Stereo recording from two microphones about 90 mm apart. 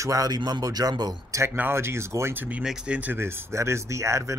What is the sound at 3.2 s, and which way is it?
Speech, 25° right (ahead or behind).